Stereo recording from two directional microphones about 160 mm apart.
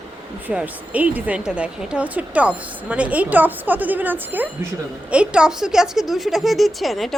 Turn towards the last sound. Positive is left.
turn(degrees=0)  # may be behind; listen again after turning